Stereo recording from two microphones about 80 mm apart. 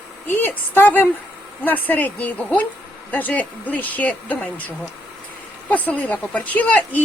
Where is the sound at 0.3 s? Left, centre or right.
Left.